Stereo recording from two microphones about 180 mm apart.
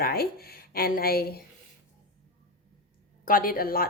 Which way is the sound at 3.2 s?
50° left (ahead or behind).